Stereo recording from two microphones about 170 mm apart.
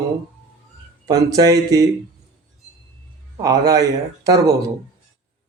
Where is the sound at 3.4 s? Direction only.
20° right (ahead or behind).